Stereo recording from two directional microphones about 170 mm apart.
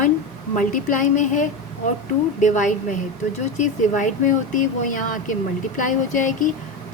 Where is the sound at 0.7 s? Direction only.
50° left (ahead or behind).